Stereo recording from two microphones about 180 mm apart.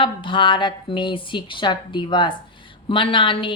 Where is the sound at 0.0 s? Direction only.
25° left (ahead or behind).